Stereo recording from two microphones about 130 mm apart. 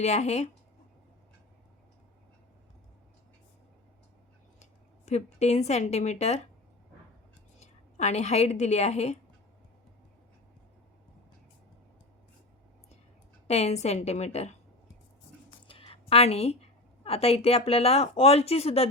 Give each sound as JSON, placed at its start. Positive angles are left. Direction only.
{"t": 0.0, "sound": "a woman's voice", "side_deg": 60}
{"t": 4.6, "sound": "speech", "side_deg": 60}
{"t": 7.6, "sound": "a woman's voice", "side_deg": 60}
{"t": 13.5, "sound": "a woman's voice", "side_deg": 55}
{"t": 15.6, "sound": "a woman's voice", "side_deg": 45}